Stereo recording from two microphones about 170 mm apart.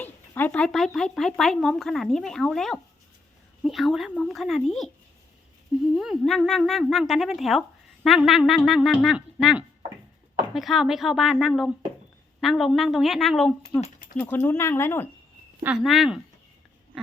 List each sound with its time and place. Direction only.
0.0 s speech: 10° left (ahead or behind)
5.9 s speech: 5° right (ahead or behind)
13.8 s a sound: 50° left (ahead or behind)
14.2 s speech: 10° left (ahead or behind)
15.6 s speech: 5° right (ahead or behind)